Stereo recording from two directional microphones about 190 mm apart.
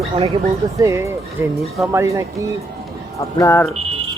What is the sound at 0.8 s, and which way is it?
Speech, 15° right (ahead or behind).